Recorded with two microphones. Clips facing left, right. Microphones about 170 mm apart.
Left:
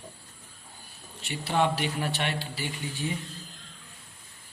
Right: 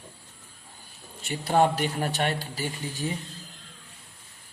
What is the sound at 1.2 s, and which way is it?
Speech, 45° right (ahead or behind).